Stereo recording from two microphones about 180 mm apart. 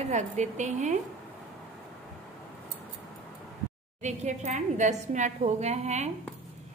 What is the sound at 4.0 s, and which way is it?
A woman's voice, 40° right (ahead or behind).